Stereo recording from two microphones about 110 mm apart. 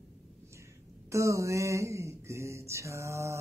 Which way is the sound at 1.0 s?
25° right (ahead or behind).